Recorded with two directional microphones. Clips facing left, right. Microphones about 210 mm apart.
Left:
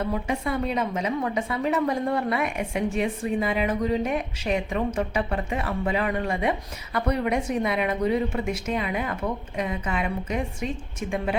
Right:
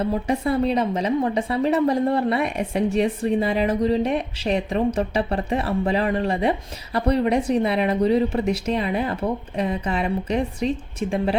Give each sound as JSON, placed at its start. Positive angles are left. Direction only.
{"t": 0.0, "sound": "a woman's voice", "side_deg": -35}